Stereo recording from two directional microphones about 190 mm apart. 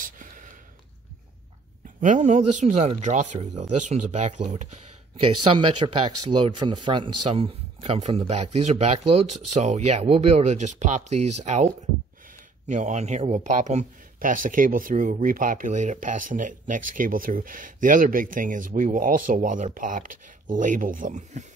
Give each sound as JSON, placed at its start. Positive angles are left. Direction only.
{"t": 0.0, "sound": "a sound", "side_deg": -45}
{"t": 2.0, "sound": "speech", "side_deg": -40}
{"t": 5.2, "sound": "speech", "side_deg": -25}